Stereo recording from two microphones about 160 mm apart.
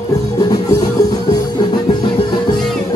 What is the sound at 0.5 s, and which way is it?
Music, 25° left (ahead or behind).